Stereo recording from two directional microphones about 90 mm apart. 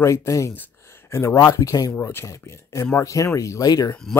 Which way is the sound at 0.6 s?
30° left (ahead or behind).